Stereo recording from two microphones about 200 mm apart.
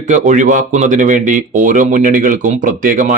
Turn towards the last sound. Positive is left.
turn(degrees=-40)  # may be behind; listen again after turning